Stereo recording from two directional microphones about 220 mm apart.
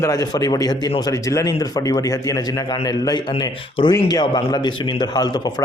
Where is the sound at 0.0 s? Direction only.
15° left (ahead or behind).